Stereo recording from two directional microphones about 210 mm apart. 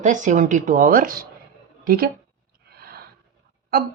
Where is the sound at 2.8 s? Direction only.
50° right (ahead or behind).